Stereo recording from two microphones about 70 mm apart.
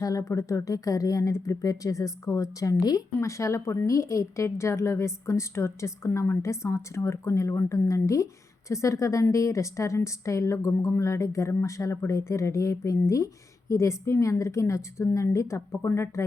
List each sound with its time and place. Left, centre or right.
0.0 s speech: left